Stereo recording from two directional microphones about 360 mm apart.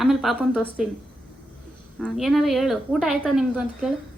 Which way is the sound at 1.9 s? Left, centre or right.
Centre.